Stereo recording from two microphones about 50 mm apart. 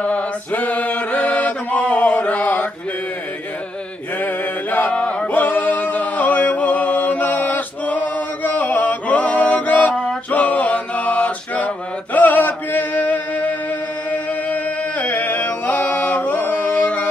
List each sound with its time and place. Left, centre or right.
0.0 s a capella: left
4.2 s mantra: left
4.9 s chant: left
5.3 s music: left
10.3 s mantra: left
14.1 s music: left